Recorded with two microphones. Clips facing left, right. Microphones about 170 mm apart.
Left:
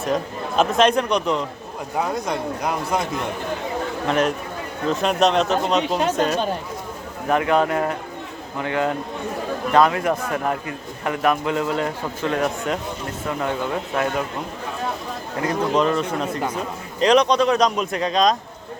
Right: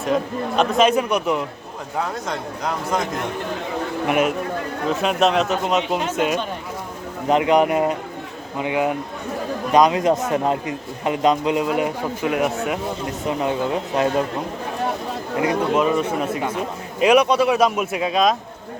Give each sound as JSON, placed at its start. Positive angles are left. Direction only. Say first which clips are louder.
{"t": 0.0, "sound": "a man's voice", "louder": "right 2 dB", "side_deg": 0}
{"t": 2.0, "sound": "speech", "louder": "left 2 dB", "side_deg": 15}
{"t": 4.0, "sound": "speech", "louder": "right 1 dB", "side_deg": -15}
{"t": 4.9, "sound": "a man's voice", "louder": "even", "side_deg": 0}
{"t": 13.2, "sound": "a man's voice", "louder": "right 3 dB", "side_deg": -20}
{"t": 15.4, "sound": "speech", "louder": "right 1 dB", "side_deg": -10}